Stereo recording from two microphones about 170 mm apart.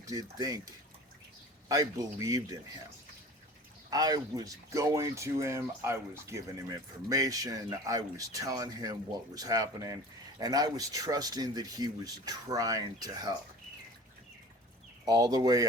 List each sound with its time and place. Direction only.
0.0 s speech: 20° right (ahead or behind)
1.6 s speech: 20° right (ahead or behind)
3.8 s speech: 20° right (ahead or behind)
15.0 s speech: 20° right (ahead or behind)